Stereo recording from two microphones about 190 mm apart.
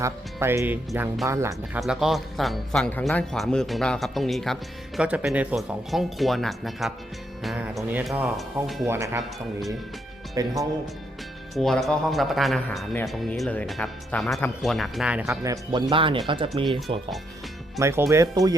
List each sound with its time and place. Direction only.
0.0 s speech: 15° right (ahead or behind)
1.8 s a man's voice: centre (ahead or behind)
8.9 s speech: 15° right (ahead or behind)
10.3 s speech: 15° right (ahead or behind)
11.5 s a man's voice: centre (ahead or behind)
15.3 s speech: 20° right (ahead or behind)
17.7 s speech: 15° right (ahead or behind)